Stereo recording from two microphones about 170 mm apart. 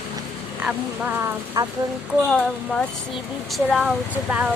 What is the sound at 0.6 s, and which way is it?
Speech, 10° right (ahead or behind).